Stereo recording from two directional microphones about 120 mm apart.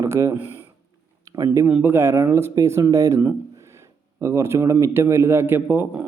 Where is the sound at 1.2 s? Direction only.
30° right (ahead or behind).